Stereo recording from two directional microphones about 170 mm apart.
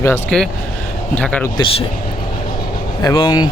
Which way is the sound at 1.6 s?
35° left (ahead or behind).